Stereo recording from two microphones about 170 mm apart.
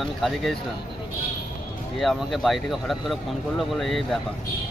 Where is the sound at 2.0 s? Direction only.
Centre (ahead or behind).